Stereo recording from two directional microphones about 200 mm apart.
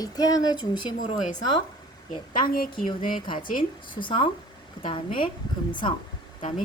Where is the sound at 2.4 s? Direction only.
45° left (ahead or behind).